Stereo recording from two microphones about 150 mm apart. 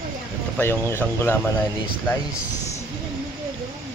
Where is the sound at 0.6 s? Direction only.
15° left (ahead or behind).